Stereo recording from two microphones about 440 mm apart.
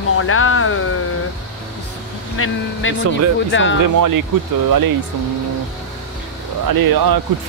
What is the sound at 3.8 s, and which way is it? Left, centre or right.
Speech, right.